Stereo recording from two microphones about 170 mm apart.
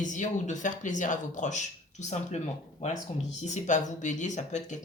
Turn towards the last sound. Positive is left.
turn(degrees=45)  # may be behind; listen again after turning